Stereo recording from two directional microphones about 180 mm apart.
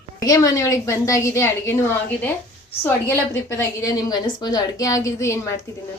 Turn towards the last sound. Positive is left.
turn(degrees=15)  # may be behind; listen again after turning